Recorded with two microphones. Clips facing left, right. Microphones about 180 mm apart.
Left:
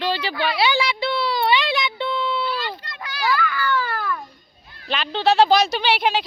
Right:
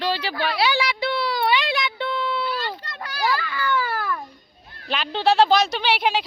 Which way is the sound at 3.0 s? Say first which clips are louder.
Left 2 dB; 35° right (ahead or behind).